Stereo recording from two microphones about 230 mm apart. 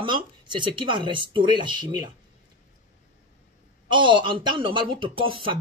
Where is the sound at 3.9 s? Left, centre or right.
Right.